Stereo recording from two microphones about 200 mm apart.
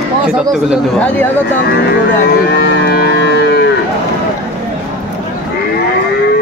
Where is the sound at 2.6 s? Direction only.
55° left (ahead or behind).